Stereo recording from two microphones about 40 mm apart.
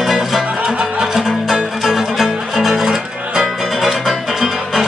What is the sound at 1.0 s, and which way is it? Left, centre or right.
Music, centre.